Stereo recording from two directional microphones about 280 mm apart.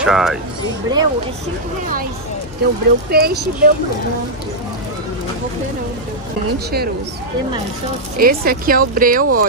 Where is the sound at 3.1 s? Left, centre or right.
Right.